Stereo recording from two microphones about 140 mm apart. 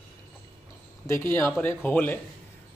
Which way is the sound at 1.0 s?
20° left (ahead or behind).